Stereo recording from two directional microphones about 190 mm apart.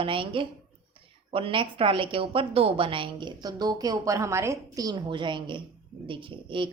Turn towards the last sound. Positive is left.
turn(degrees=-25)  # may be behind; listen again after turning